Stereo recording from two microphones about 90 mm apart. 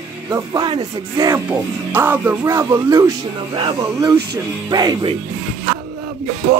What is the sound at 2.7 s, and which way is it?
Music, 40° right (ahead or behind).